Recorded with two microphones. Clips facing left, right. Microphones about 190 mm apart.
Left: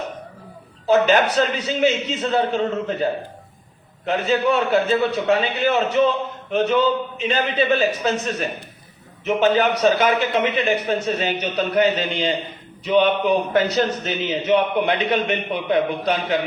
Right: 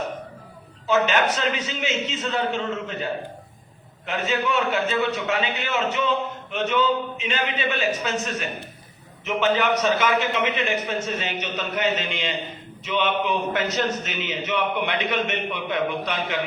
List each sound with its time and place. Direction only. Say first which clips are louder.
0.9 s a man's voice: left 5 dB; 35° left (ahead or behind)